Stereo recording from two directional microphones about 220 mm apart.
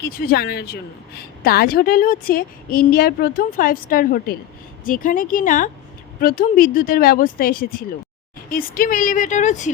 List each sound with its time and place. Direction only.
0.0 s a woman's voice: 40° left (ahead or behind)